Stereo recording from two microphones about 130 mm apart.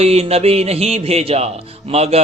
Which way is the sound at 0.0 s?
50° right (ahead or behind).